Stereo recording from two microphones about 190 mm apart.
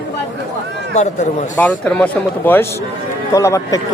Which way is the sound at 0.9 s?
40° left (ahead or behind).